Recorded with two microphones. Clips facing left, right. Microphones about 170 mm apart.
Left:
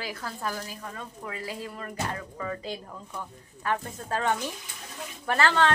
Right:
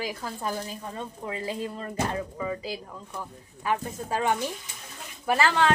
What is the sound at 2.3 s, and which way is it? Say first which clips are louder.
A woman's voice: right 2 dB; 10° right (ahead or behind).